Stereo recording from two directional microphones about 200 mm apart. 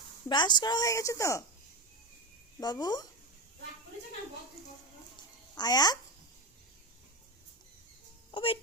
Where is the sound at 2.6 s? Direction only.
20° left (ahead or behind).